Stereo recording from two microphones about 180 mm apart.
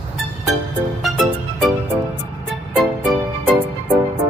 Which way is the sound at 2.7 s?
Centre (ahead or behind).